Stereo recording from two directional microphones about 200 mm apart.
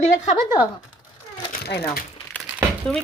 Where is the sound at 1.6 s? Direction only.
55° left (ahead or behind).